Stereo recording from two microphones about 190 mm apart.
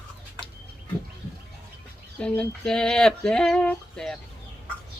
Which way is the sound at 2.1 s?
5° left (ahead or behind).